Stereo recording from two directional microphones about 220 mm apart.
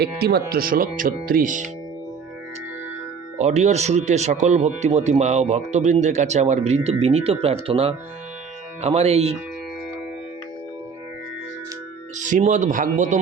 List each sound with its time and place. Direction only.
0.0 s speech: 45° right (ahead or behind)
3.3 s speech: 30° right (ahead or behind)
12.1 s speech: 35° right (ahead or behind)